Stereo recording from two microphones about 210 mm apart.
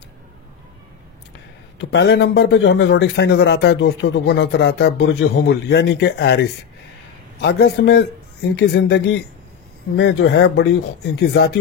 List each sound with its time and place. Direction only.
1.8 s a man's voice: 55° left (ahead or behind)